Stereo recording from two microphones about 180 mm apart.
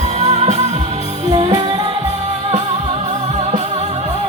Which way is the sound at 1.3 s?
25° right (ahead or behind).